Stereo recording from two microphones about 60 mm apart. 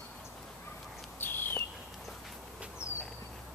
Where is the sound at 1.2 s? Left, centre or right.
Left.